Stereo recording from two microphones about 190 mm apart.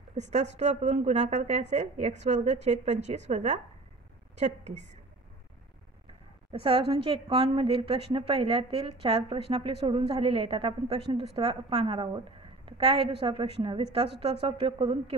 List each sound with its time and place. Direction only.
0.1 s a woman's voice: 35° right (ahead or behind)
6.6 s a woman's voice: 30° right (ahead or behind)